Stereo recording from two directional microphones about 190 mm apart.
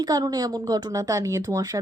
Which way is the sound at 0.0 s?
20° right (ahead or behind).